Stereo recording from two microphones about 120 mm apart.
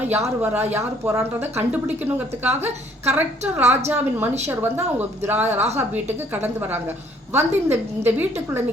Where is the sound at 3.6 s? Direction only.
65° right (ahead or behind).